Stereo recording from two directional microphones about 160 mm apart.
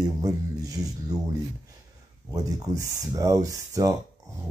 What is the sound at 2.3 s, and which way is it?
Speech, 20° right (ahead or behind).